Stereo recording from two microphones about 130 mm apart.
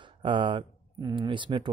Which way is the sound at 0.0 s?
40° right (ahead or behind).